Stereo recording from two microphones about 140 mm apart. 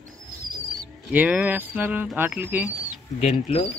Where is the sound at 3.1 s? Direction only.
50° left (ahead or behind).